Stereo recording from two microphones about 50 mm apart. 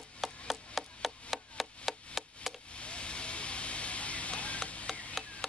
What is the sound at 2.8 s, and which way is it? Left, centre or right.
Vehicle, left.